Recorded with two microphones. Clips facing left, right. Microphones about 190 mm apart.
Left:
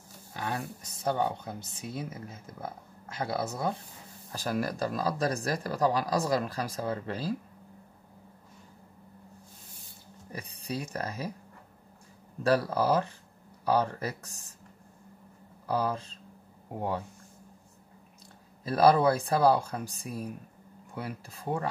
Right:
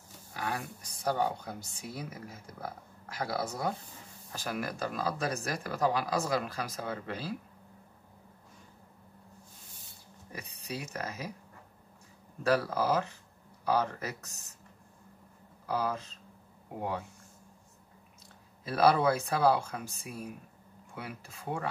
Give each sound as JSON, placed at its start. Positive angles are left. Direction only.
{"t": 0.3, "sound": "speech", "side_deg": 25}
{"t": 4.3, "sound": "speech", "side_deg": 35}
{"t": 10.3, "sound": "speech", "side_deg": 35}
{"t": 12.4, "sound": "speech", "side_deg": 35}
{"t": 15.6, "sound": "speech", "side_deg": 30}
{"t": 18.6, "sound": "speech", "side_deg": 35}